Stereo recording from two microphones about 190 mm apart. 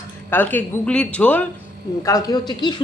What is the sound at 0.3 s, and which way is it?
A man's voice, 10° left (ahead or behind).